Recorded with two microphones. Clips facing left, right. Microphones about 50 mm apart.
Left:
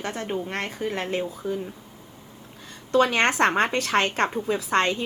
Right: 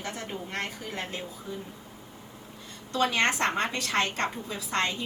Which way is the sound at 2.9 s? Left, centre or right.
Left.